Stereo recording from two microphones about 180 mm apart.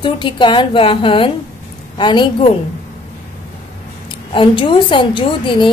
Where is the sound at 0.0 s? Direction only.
25° left (ahead or behind).